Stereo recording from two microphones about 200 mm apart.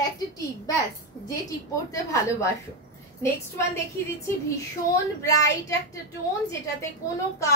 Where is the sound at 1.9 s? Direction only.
15° left (ahead or behind).